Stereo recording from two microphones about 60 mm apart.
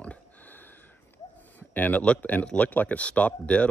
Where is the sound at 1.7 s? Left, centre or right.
Left.